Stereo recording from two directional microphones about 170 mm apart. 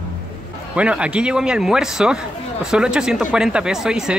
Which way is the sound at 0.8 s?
5° right (ahead or behind).